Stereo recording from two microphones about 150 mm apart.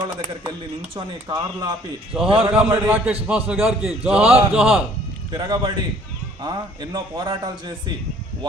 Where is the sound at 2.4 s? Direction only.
5° right (ahead or behind).